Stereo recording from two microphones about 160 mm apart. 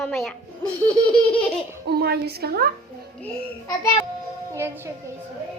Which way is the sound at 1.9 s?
85° right.